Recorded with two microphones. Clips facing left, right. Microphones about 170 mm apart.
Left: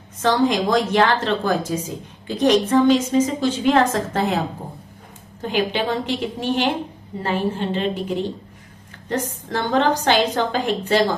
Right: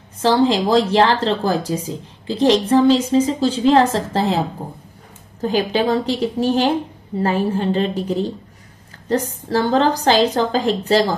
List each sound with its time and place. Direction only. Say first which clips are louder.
0.2 s speech: right 3 dB; 30° right (ahead or behind)
5.4 s speech: right 4 dB; 40° right (ahead or behind)